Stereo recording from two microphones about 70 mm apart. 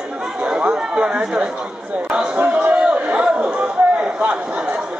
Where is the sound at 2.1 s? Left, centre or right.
Right.